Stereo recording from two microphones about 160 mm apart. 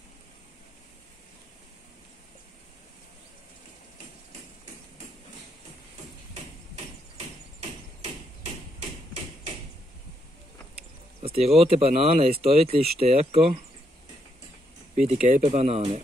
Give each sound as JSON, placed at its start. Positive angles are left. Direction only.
{"t": 11.2, "sound": "speech", "side_deg": -40}
{"t": 15.0, "sound": "speech", "side_deg": -45}